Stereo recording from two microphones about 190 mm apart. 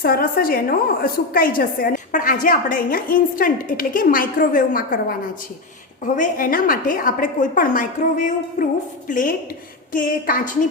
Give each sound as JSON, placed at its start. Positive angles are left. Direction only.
{"t": 0.0, "sound": "a woman's voice", "side_deg": 50}
{"t": 6.1, "sound": "a woman's voice", "side_deg": 50}